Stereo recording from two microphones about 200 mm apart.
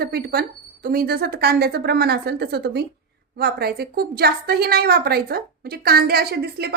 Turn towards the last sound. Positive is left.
turn(degrees=-55)  # may be behind; listen again after turning